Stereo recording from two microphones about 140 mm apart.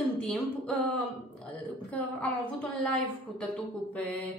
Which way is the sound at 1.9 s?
10° left (ahead or behind).